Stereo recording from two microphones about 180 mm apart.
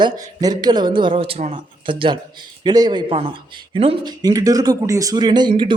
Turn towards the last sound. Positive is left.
turn(degrees=-25)  # may be behind; listen again after turning